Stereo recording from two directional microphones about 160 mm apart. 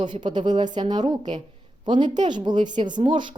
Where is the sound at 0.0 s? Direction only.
30° right (ahead or behind).